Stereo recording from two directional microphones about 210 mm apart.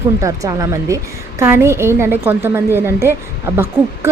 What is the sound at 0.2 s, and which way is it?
A woman's voice, 15° right (ahead or behind).